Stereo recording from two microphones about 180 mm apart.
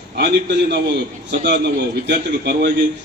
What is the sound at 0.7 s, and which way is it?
A man's voice, 70° right (ahead or behind).